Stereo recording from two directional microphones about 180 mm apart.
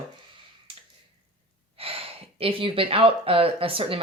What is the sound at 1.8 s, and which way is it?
Speech, 30° right (ahead or behind).